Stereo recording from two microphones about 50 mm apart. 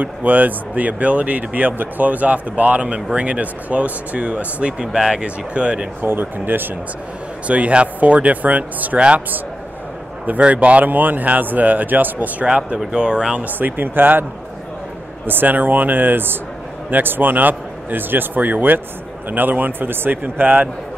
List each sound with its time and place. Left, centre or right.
0.0 s speech: right
5.9 s speech: right
7.4 s speech: right
10.2 s speech: right
12.4 s speech: right
13.4 s speech: right
15.2 s speech: right